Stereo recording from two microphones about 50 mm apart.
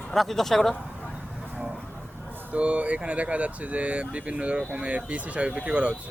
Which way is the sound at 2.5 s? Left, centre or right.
Right.